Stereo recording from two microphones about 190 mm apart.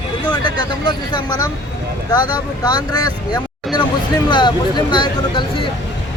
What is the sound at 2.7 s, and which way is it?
Speech, 20° left (ahead or behind).